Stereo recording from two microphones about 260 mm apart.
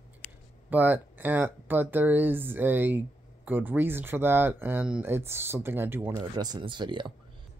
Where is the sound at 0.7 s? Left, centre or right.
Centre.